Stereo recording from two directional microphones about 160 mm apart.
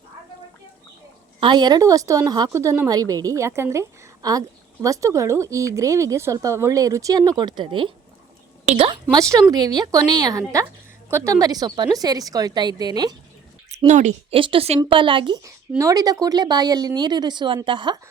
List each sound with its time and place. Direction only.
1.4 s a woman's voice: 30° right (ahead or behind)
9.5 s a woman's voice: 25° right (ahead or behind)
13.7 s speech: 45° right (ahead or behind)
14.3 s a woman's voice: 35° right (ahead or behind)